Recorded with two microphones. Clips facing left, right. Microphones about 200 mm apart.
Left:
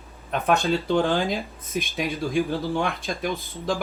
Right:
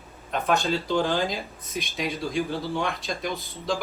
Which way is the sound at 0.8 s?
55° left (ahead or behind).